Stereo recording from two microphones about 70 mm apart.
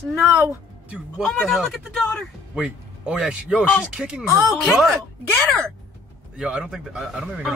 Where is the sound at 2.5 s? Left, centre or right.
Centre.